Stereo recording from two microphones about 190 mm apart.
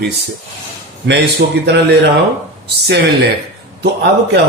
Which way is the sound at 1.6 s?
65° right (ahead or behind).